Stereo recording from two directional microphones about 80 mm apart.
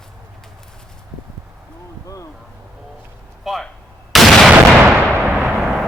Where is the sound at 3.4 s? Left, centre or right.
Centre.